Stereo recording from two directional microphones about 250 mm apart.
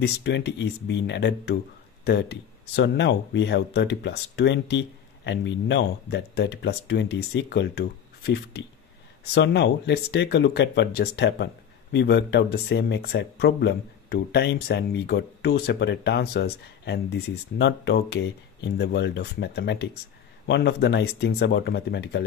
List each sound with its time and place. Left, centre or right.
0.0 s speech: left